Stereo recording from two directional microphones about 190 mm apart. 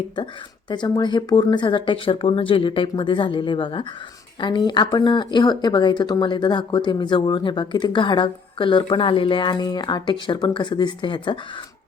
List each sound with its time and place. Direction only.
0.7 s speech: 25° left (ahead or behind)